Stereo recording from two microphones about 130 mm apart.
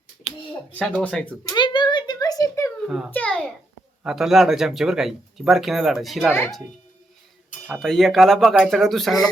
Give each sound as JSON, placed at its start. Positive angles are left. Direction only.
{"t": 0.7, "sound": "speech", "side_deg": 10}
{"t": 1.5, "sound": "a sound", "side_deg": 35}
{"t": 2.8, "sound": "a child's voice", "side_deg": -5}
{"t": 3.1, "sound": "speech", "side_deg": 10}
{"t": 4.0, "sound": "speech", "side_deg": -5}
{"t": 7.7, "sound": "speech", "side_deg": 0}